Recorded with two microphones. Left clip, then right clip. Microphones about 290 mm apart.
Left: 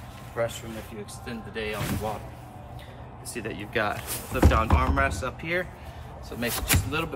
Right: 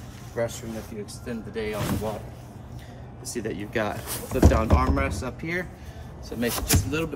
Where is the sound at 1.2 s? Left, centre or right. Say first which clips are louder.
Right 2 dB; right.